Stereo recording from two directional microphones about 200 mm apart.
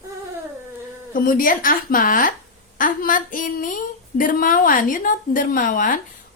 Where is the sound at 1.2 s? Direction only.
45° left (ahead or behind).